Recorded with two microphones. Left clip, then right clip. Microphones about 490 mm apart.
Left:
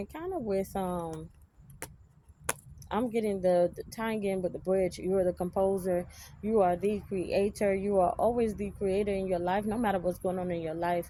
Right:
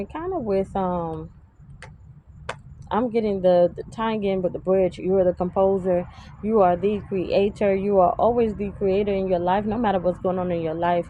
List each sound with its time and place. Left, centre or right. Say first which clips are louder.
0.0 s speech: right 8 dB; left
2.5 s speech: right 7 dB; left